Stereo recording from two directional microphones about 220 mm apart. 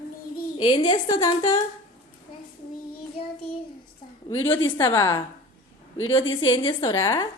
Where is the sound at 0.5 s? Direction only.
20° left (ahead or behind).